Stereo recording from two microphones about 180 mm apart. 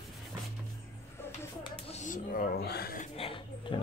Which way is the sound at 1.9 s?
45° left (ahead or behind).